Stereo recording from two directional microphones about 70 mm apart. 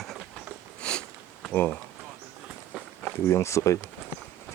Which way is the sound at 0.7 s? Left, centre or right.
Centre.